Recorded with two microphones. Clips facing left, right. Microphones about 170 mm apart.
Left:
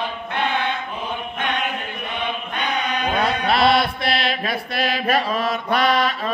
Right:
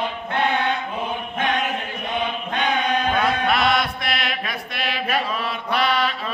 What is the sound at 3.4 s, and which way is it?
Mantra, 30° left (ahead or behind).